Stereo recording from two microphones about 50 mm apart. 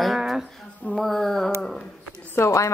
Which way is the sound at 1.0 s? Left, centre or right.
Centre.